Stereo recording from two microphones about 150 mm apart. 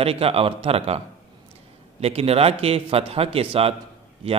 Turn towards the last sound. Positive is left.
turn(degrees=-40)  # may be behind; listen again after turning